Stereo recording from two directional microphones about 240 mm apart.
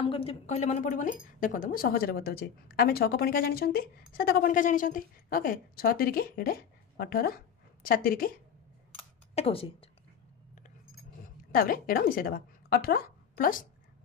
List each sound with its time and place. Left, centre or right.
0.1 s speech: left
9.3 s speech: left
11.5 s a woman's voice: left